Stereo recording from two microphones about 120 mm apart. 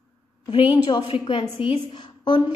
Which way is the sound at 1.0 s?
50° left (ahead or behind).